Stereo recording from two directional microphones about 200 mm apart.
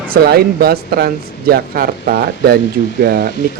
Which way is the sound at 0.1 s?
50° right (ahead or behind).